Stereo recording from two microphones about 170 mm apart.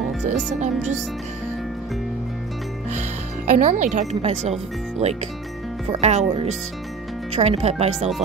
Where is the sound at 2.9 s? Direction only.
40° right (ahead or behind).